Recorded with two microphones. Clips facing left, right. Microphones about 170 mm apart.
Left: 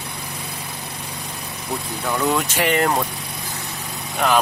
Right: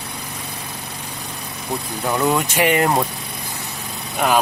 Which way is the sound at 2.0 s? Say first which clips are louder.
Right 2 dB; 15° right (ahead or behind).